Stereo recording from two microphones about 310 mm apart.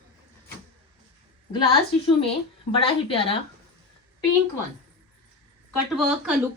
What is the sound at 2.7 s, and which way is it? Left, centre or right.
Speech, centre.